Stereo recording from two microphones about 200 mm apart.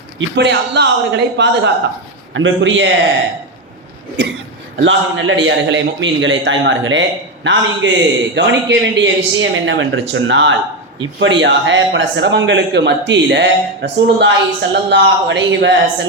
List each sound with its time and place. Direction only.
0.2 s a man's voice: 60° right (ahead or behind)
2.3 s a man's voice: 70° right (ahead or behind)
4.2 s a man's voice: 60° right (ahead or behind)